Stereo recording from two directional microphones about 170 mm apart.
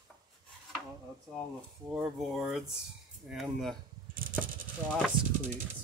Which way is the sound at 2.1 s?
Centre (ahead or behind).